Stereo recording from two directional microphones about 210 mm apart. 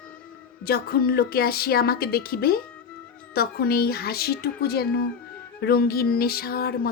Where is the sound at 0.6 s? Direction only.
45° left (ahead or behind).